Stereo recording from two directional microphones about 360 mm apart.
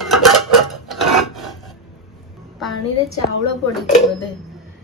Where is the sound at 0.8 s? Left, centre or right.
Centre.